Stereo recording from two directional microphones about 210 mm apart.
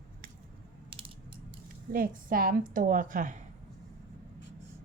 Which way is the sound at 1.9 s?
45° right (ahead or behind).